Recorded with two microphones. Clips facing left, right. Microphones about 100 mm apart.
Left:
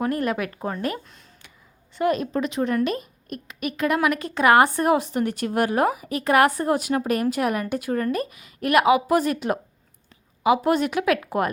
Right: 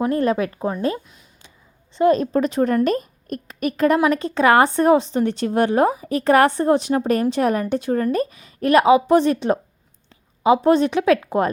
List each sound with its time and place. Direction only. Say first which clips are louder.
0.0 s speech: right 5 dB; 25° right (ahead or behind)
2.0 s a woman's voice: right 6 dB; 30° right (ahead or behind)